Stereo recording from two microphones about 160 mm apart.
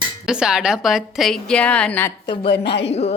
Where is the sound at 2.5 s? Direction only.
90° left.